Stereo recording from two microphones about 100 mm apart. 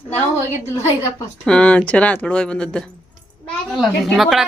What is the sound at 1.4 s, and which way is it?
Speech, 10° left (ahead or behind).